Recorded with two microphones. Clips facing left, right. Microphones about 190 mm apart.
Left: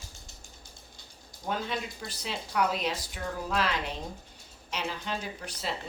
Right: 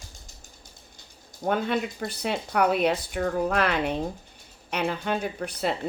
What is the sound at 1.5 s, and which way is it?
Speech, 55° right (ahead or behind).